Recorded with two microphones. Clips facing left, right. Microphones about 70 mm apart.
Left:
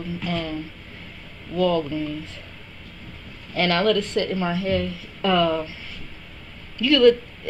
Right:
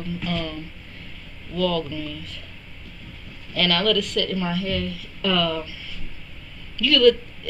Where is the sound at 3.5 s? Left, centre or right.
Left.